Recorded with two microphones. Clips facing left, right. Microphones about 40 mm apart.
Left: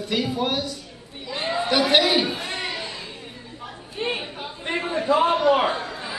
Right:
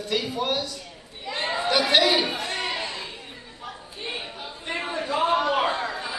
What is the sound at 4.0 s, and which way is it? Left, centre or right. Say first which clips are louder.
Chatter: left 8 dB; left.